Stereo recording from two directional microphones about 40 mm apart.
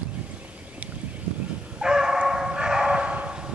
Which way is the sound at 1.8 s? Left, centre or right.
Centre.